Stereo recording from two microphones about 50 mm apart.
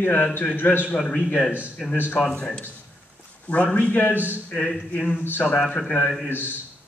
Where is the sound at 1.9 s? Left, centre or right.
Left.